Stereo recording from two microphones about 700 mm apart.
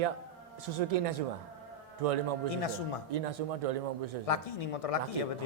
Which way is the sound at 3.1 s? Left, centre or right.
Right.